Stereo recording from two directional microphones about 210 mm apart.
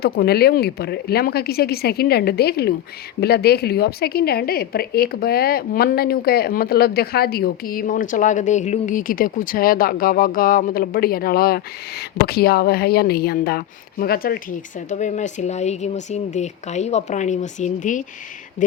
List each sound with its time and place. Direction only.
0.0 s a woman's voice: 50° left (ahead or behind)